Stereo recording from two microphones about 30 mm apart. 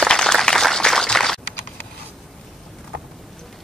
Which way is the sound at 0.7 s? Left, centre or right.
Left.